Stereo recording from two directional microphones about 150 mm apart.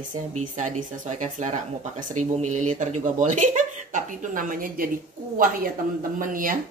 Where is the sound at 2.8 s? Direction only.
55° right (ahead or behind).